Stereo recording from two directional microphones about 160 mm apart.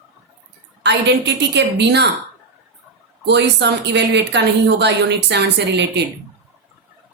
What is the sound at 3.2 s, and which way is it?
A woman's voice, 90° right.